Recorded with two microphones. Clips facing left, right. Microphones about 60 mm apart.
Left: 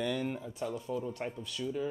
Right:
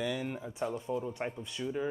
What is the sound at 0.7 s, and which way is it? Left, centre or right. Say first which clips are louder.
Speech: right 1 dB; right.